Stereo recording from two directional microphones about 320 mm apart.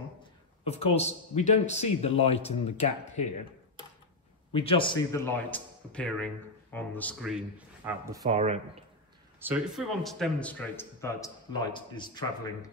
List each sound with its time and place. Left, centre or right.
0.7 s a man's voice: centre
4.5 s a man's voice: centre
9.4 s a man's voice: centre